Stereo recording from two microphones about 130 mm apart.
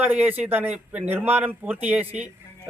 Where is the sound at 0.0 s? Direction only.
15° right (ahead or behind).